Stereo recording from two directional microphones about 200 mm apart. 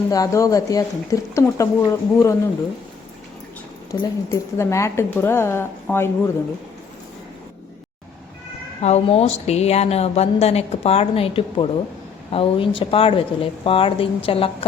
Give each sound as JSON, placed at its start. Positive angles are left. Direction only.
{"t": 0.1, "sound": "speech", "side_deg": 15}
{"t": 3.9, "sound": "a woman's voice", "side_deg": 20}
{"t": 8.8, "sound": "a woman's voice", "side_deg": 30}